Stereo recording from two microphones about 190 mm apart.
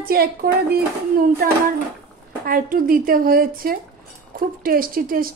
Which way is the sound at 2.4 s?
50° right (ahead or behind).